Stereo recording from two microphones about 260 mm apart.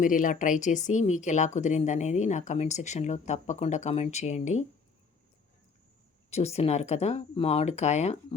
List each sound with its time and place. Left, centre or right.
0.0 s speech: left
6.3 s speech: left